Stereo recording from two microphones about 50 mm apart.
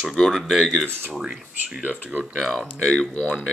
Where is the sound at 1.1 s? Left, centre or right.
Centre.